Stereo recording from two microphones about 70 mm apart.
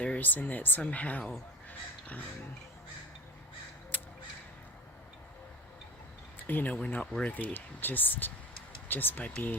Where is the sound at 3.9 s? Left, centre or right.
Left.